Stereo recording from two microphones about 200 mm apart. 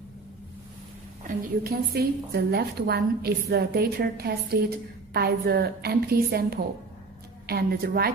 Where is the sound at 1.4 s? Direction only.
50° right (ahead or behind).